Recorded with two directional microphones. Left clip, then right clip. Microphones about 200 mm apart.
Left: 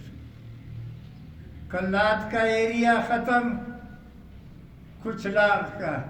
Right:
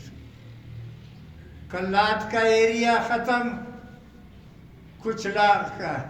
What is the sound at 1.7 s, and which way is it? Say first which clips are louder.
A man's voice: right 1 dB; 40° right (ahead or behind).